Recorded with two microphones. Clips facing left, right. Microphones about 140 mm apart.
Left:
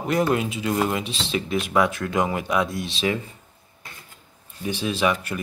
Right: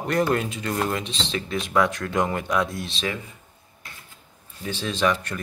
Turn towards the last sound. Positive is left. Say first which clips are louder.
# even
turn(degrees=15)  # may be behind; listen again after turning